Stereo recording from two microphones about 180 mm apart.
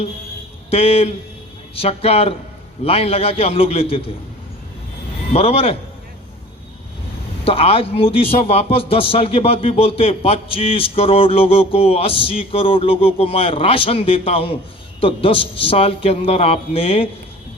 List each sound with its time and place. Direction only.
0.7 s a man's voice: 35° left (ahead or behind)
5.3 s a man's voice: 35° left (ahead or behind)
7.4 s a man's voice: 30° left (ahead or behind)